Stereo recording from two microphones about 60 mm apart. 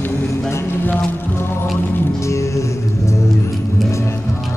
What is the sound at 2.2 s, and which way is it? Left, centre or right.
Music, left.